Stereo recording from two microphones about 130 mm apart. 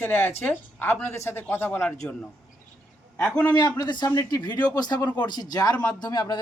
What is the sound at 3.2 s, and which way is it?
Speech, 20° left (ahead or behind).